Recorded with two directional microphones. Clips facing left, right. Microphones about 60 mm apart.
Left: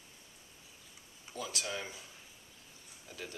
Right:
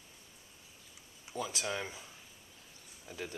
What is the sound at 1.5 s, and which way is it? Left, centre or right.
Speech, right.